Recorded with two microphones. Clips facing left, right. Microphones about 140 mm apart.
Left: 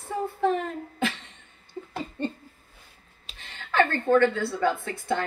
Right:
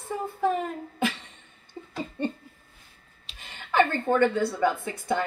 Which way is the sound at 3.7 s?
15° right (ahead or behind).